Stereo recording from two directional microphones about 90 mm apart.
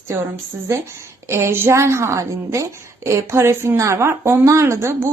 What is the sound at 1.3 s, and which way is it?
A woman's voice, 30° right (ahead or behind).